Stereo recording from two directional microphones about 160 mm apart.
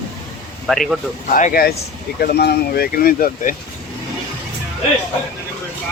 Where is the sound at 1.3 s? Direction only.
65° left (ahead or behind).